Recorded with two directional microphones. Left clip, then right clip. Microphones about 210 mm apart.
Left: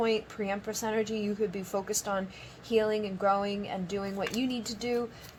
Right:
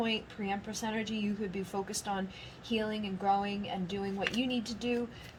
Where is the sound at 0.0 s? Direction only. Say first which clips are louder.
Left 5 dB; 35° left (ahead or behind).